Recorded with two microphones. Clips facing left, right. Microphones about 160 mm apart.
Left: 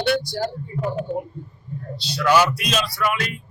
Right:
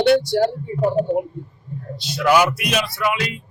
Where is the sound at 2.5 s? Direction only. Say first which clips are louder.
Right 2 dB; 60° right (ahead or behind).